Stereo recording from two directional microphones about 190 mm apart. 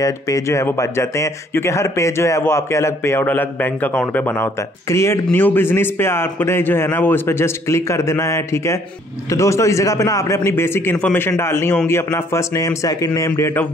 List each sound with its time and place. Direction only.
0.0 s speech: 15° left (ahead or behind)